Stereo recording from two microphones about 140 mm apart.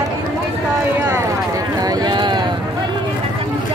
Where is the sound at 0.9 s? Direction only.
20° right (ahead or behind).